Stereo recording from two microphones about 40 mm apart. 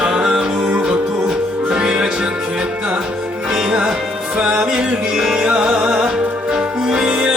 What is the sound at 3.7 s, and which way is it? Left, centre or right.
Speech, centre.